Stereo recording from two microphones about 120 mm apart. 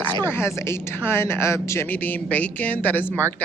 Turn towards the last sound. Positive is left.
turn(degrees=15)  # may be behind; listen again after turning